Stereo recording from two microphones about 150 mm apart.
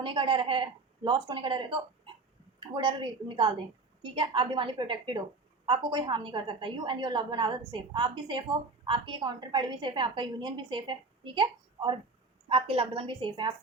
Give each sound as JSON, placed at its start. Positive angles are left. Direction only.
{"t": 0.0, "sound": "a woman's voice", "side_deg": -35}